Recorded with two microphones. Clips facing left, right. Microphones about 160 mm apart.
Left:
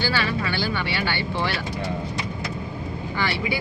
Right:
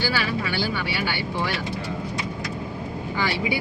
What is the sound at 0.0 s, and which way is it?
Speech, 5° right (ahead or behind).